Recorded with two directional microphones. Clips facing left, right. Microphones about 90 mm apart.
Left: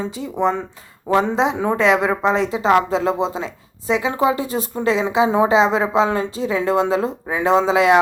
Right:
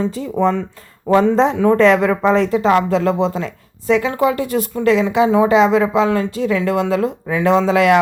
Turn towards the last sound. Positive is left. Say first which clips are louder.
# right 2 dB
turn(degrees=25)  # may be behind; listen again after turning